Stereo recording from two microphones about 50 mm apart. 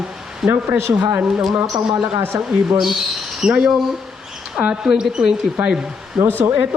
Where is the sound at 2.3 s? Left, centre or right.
Right.